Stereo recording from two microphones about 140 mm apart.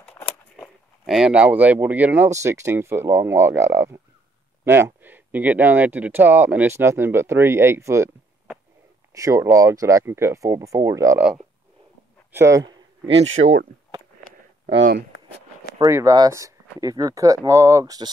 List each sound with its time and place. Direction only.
1.0 s speech: 5° right (ahead or behind); by 8.1 s 20° right (ahead or behind)
9.1 s speech: 20° right (ahead or behind)
11.1 s speech: 5° right (ahead or behind)
12.3 s a sound: 20° right (ahead or behind)
13.2 s speech: 50° right (ahead or behind)
15.8 s speech: 25° right (ahead or behind)